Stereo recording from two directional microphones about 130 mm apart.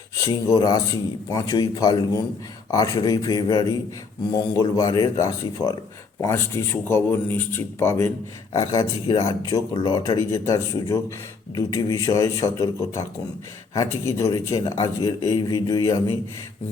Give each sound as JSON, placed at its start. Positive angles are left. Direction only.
{"t": 0.2, "sound": "speech", "side_deg": 25}